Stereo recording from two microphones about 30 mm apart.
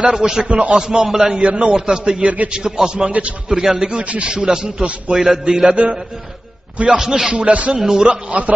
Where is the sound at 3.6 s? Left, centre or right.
Centre.